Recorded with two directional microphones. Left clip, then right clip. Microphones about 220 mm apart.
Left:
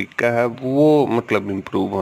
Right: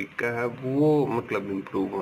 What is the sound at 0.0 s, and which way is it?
Speech, 55° left (ahead or behind).